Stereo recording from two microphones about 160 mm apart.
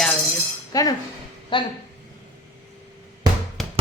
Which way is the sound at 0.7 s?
20° left (ahead or behind).